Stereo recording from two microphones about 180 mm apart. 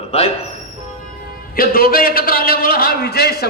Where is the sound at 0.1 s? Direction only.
35° left (ahead or behind).